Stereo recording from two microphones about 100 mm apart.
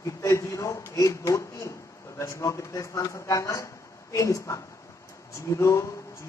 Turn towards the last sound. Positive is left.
turn(degrees=30)  # may be behind; listen again after turning